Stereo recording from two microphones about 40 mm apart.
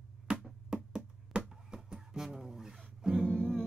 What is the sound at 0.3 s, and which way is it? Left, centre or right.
Music, right.